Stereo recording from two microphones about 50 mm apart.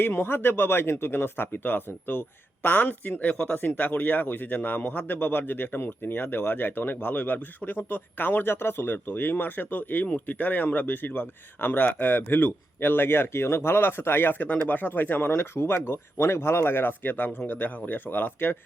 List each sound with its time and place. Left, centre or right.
0.0 s a man's voice: left
3.5 s a man's voice: left